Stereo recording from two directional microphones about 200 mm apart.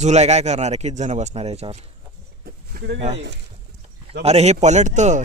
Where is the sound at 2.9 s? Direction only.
30° right (ahead or behind).